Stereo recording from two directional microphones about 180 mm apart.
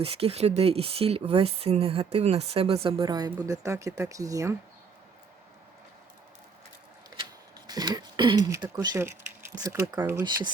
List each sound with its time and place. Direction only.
0.0 s speech: 35° right (ahead or behind)
7.7 s speech: 20° right (ahead or behind)